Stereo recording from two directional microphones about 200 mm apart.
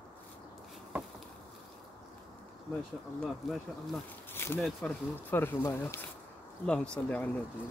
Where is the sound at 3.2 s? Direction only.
Centre (ahead or behind).